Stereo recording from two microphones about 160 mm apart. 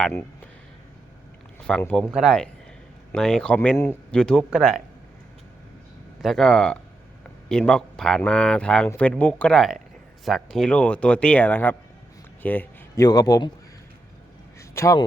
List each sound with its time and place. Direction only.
0.0 s speech: 5° left (ahead or behind)
1.8 s speech: 5° left (ahead or behind)
6.2 s speech: centre (ahead or behind)
13.0 s a man's voice: 20° left (ahead or behind)
14.6 s a sound: 20° left (ahead or behind)